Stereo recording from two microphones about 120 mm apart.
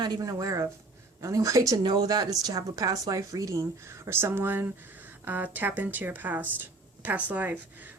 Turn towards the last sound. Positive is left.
turn(degrees=-15)  # may be behind; listen again after turning